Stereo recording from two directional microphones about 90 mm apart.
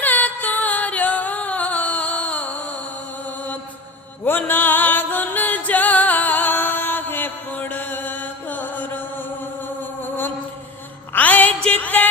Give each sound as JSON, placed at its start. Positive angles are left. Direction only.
{"t": 0.0, "sound": "music", "side_deg": 20}
{"t": 3.2, "sound": "mantra", "side_deg": 20}
{"t": 4.2, "sound": "music", "side_deg": 20}
{"t": 11.1, "sound": "music", "side_deg": 20}